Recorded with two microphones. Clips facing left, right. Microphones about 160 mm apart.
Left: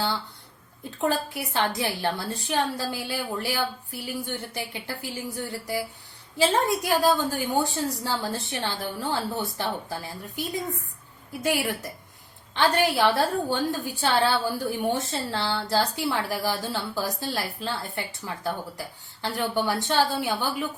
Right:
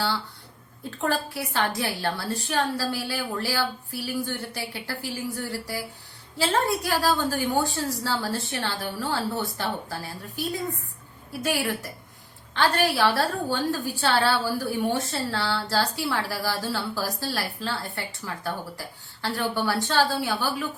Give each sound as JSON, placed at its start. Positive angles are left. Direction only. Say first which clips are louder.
{"t": 0.9, "sound": "a woman's voice", "louder": "left 1 dB", "side_deg": 20}